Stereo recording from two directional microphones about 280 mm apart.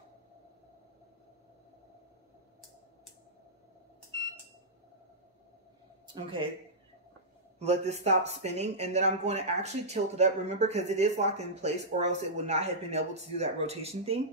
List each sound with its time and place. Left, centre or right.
7.5 s speech: right